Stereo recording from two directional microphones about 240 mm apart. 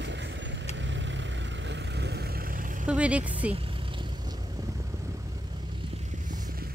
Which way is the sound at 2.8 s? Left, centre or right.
Centre.